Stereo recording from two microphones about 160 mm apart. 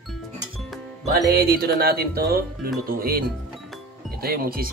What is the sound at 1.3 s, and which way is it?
Speech, 75° right (ahead or behind).